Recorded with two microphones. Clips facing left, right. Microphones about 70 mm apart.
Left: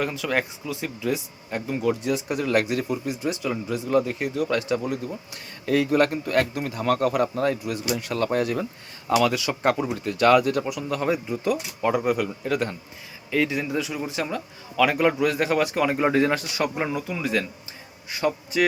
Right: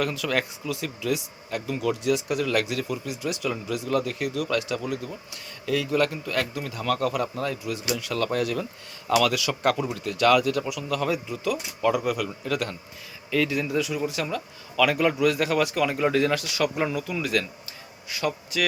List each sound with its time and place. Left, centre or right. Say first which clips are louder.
0.0 s speech: left 1 dB; centre
13.3 s speech: even; centre
15.2 s speech: even; left
16.7 s speech: even; centre